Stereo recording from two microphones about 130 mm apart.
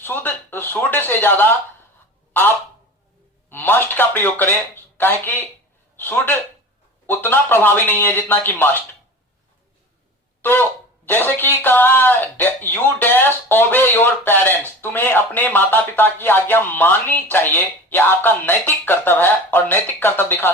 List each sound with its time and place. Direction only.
0.0 s speech: 15° left (ahead or behind)
3.5 s speech: 15° left (ahead or behind)
10.4 s speech: 15° left (ahead or behind)